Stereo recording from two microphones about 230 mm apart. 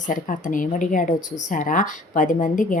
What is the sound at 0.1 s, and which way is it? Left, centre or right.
Speech, left.